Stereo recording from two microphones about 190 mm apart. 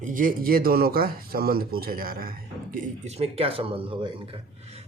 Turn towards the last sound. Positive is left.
turn(degrees=-30)  # may be behind; listen again after turning